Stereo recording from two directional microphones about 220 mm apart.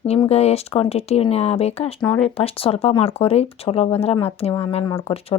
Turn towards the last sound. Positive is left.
turn(degrees=25)  # may be behind; listen again after turning